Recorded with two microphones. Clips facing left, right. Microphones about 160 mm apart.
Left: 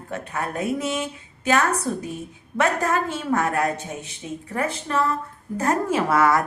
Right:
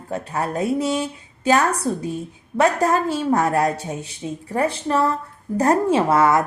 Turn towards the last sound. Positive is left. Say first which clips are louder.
# right 3 dB
turn(degrees=-25)  # may be behind; listen again after turning